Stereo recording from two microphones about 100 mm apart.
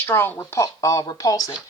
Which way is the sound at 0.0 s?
25° left (ahead or behind).